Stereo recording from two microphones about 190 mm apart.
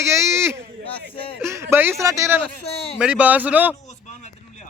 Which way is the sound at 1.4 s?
15° right (ahead or behind).